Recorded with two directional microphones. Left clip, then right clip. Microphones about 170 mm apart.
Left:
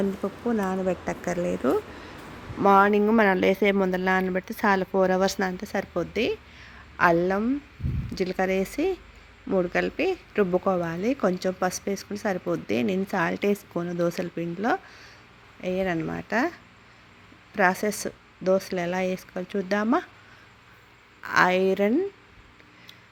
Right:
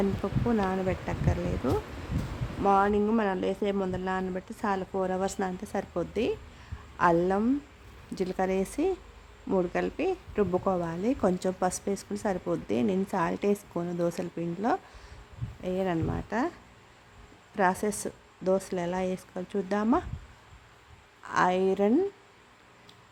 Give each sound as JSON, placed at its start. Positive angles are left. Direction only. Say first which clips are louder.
{"t": 0.2, "sound": "a woman's voice", "louder": "left 1 dB", "side_deg": 10}
{"t": 10.4, "sound": "speech", "louder": "left 4 dB", "side_deg": 15}
{"t": 10.8, "sound": "a woman's voice", "louder": "left 3 dB", "side_deg": 0}
{"t": 21.2, "sound": "a woman's voice", "louder": "left 4 dB", "side_deg": 0}